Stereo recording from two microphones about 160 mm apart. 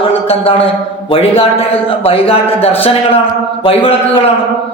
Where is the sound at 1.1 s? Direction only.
35° left (ahead or behind).